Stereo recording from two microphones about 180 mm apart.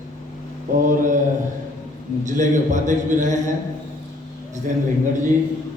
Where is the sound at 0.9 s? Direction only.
45° right (ahead or behind).